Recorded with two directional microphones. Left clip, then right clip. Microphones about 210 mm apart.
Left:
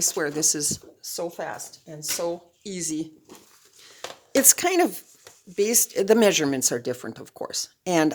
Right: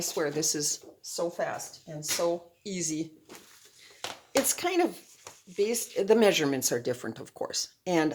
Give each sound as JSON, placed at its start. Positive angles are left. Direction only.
{"t": 0.0, "sound": "speech", "side_deg": 40}
{"t": 1.1, "sound": "speech", "side_deg": 40}
{"t": 4.3, "sound": "a woman's voice", "side_deg": 50}
{"t": 7.9, "sound": "speech", "side_deg": 40}